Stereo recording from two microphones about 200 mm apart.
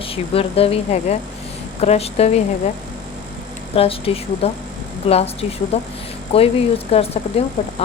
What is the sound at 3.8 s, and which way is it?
A woman's voice, 30° left (ahead or behind).